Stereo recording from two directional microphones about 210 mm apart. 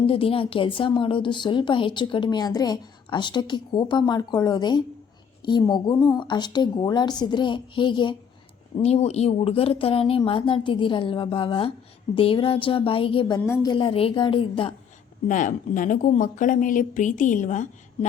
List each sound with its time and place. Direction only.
0.0 s a woman's voice: 25° left (ahead or behind)
15.3 s a woman's voice: 35° left (ahead or behind)